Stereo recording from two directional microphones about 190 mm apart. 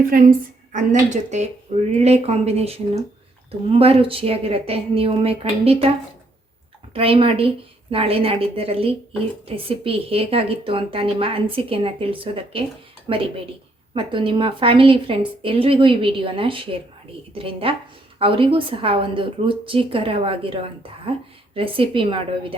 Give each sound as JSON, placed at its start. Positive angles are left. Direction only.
{"t": 0.1, "sound": "a woman's voice", "side_deg": -45}
{"t": 6.9, "sound": "speech", "side_deg": -30}